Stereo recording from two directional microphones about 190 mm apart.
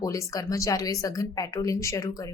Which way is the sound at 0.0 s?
15° left (ahead or behind).